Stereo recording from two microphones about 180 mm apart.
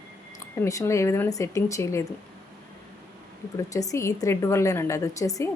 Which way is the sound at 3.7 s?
20° left (ahead or behind).